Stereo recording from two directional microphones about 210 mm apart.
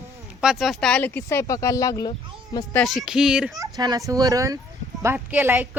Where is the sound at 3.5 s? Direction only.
15° right (ahead or behind).